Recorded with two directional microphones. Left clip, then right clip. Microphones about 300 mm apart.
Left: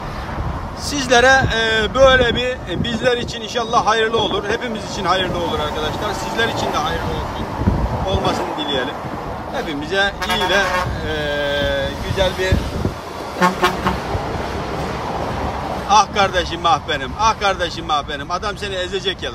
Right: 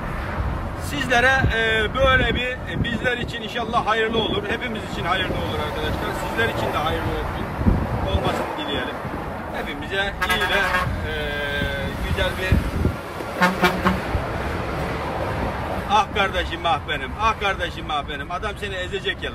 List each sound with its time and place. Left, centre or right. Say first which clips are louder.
0.9 s speech: left 6 dB; centre
9.9 s speech: left 4 dB; centre
11.1 s a sound: left 6 dB; centre
13.4 s vehicle: left 3 dB; left
15.9 s speech: left 6 dB; centre